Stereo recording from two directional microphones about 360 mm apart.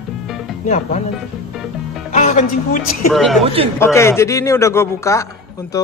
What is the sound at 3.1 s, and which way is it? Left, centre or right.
Speech, centre.